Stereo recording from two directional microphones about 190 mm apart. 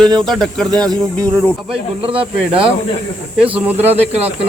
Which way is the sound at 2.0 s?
30° right (ahead or behind).